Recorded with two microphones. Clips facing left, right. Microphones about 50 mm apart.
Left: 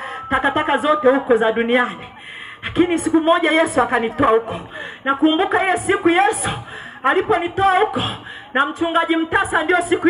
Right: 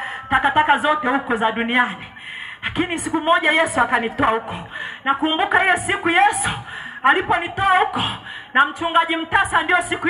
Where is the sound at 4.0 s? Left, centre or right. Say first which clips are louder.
Left 4 dB; right.